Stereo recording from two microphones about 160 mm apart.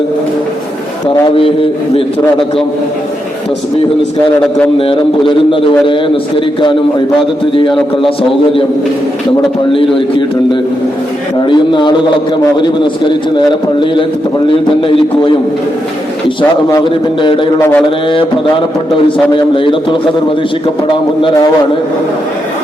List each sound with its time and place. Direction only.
4.8 s speech: 35° left (ahead or behind)
7.5 s speech: 30° left (ahead or behind)
9.7 s a man's voice: 30° left (ahead or behind)
13.3 s a man's voice: 30° left (ahead or behind)
16.7 s speech: 30° left (ahead or behind)